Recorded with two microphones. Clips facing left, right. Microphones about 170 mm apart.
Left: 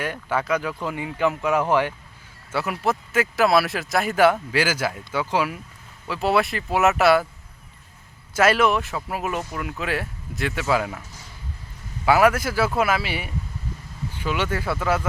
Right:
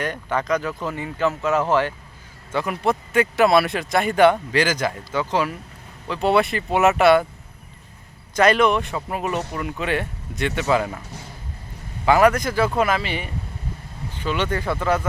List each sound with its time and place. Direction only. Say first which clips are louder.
0.0 s speech: right 1 dB; 10° left (ahead or behind)
8.4 s speech: right 2 dB; 5° left (ahead or behind)
12.0 s speech: right 2 dB; 5° left (ahead or behind)